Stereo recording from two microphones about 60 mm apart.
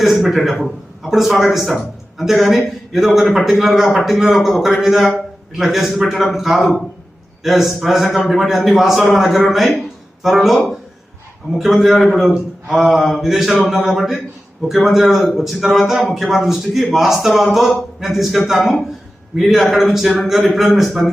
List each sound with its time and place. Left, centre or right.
0.0 s a man's voice: centre